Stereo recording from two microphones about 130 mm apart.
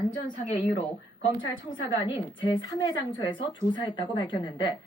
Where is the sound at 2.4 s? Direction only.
35° left (ahead or behind).